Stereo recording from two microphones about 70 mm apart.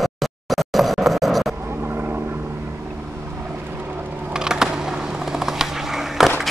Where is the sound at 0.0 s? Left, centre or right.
Centre.